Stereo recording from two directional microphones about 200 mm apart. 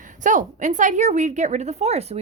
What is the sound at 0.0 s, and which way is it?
A woman's voice, 40° right (ahead or behind).